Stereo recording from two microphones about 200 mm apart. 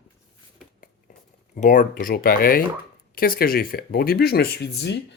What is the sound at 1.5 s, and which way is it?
Speech, 40° left (ahead or behind).